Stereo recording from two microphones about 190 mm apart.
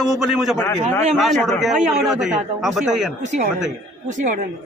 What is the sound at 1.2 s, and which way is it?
A man's voice, centre (ahead or behind).